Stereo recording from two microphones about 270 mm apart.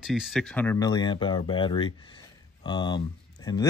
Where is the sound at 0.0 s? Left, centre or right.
Centre.